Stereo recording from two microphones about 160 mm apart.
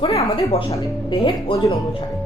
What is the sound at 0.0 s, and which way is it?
A woman's voice, 40° left (ahead or behind).